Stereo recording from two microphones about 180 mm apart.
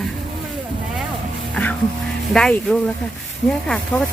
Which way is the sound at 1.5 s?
5° left (ahead or behind).